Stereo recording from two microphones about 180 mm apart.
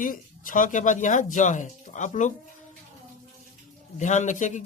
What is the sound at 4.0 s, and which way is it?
Speech, 40° left (ahead or behind).